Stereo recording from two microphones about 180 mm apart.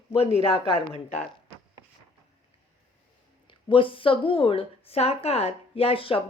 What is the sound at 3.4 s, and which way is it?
Speech, 30° left (ahead or behind).